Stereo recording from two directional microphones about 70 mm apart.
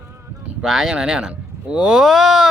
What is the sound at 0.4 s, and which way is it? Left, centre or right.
Speech, centre.